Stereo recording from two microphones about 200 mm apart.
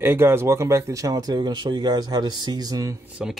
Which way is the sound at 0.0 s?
10° right (ahead or behind).